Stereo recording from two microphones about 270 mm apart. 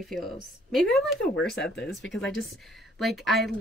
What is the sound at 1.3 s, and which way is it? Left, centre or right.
Speech, left.